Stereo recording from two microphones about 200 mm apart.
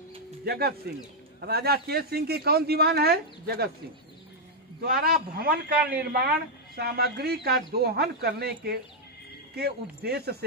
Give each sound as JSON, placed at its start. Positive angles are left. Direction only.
{"t": 0.5, "sound": "a man's voice", "side_deg": -50}
{"t": 4.8, "sound": "a man's voice", "side_deg": -50}